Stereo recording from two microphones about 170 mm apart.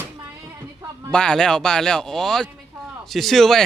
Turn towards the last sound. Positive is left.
turn(degrees=0)  # may be behind; listen again after turning